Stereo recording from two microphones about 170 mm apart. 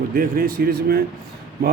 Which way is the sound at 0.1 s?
60° right (ahead or behind).